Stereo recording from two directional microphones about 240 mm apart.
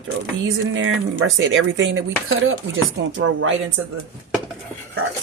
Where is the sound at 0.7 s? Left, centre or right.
Right.